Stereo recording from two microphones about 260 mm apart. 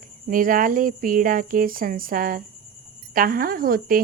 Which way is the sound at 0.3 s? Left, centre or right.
Right.